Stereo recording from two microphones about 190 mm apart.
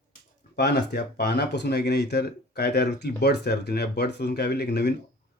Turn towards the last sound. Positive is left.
turn(degrees=60)  # may be behind; listen again after turning